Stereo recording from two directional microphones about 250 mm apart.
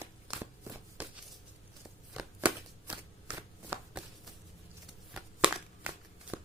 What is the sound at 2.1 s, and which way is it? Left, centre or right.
Chopping, centre.